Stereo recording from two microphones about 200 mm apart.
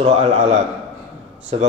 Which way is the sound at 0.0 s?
35° right (ahead or behind).